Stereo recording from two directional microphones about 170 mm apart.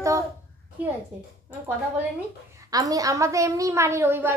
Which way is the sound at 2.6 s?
20° right (ahead or behind).